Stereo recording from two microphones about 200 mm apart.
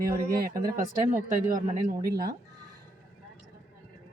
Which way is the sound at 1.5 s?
45° right (ahead or behind).